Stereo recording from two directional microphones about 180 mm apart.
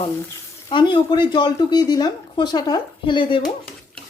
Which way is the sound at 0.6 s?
25° left (ahead or behind).